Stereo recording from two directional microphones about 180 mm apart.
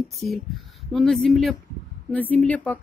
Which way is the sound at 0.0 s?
Centre (ahead or behind).